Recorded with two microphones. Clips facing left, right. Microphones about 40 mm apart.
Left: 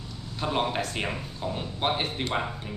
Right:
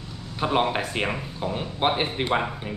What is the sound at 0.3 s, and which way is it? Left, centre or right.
Speech, right.